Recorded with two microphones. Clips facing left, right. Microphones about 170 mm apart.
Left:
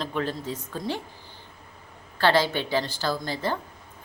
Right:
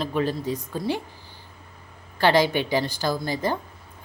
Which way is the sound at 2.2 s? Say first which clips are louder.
Right 3 dB; 15° right (ahead or behind).